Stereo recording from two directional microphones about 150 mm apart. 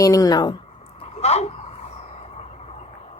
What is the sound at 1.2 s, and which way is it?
Speech, 45° left (ahead or behind).